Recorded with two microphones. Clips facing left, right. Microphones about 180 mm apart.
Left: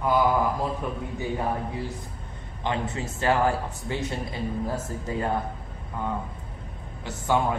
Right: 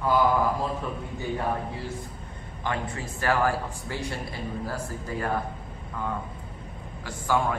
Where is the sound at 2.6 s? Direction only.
20° left (ahead or behind).